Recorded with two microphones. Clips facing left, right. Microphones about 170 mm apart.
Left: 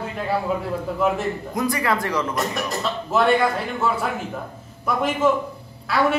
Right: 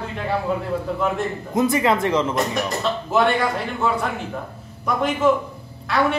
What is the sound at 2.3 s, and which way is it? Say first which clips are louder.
A woman's voice: right 2 dB; centre (ahead or behind).